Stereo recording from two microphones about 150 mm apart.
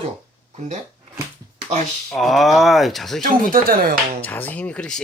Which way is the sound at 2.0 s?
Centre (ahead or behind).